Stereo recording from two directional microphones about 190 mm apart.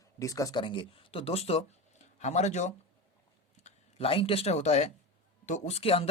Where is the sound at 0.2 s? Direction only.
15° left (ahead or behind).